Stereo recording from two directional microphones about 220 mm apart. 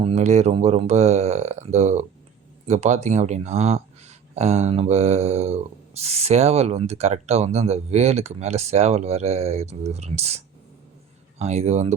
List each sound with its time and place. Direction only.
0.0 s speech: 30° right (ahead or behind)